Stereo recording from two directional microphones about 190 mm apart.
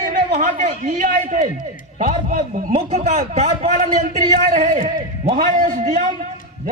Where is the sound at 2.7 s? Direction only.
35° right (ahead or behind).